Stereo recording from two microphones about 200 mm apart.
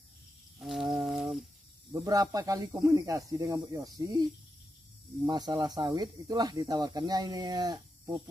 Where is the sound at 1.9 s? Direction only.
15° right (ahead or behind).